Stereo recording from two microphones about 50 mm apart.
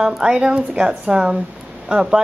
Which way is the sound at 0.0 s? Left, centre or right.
Centre.